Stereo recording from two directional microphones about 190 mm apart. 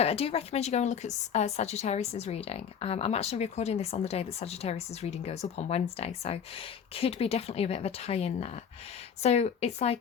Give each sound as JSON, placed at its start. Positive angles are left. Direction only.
{"t": 0.0, "sound": "a woman's voice", "side_deg": 30}